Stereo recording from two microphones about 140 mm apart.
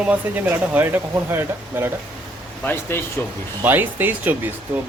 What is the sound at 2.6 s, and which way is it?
Speech, 15° left (ahead or behind).